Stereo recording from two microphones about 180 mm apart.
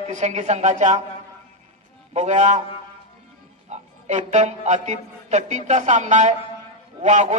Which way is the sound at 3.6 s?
40° right (ahead or behind).